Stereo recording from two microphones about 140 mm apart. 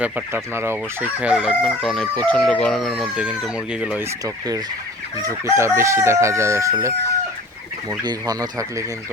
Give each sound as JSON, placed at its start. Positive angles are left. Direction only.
{"t": 0.0, "sound": "speech", "side_deg": -15}
{"t": 4.2, "sound": "crowing", "side_deg": -25}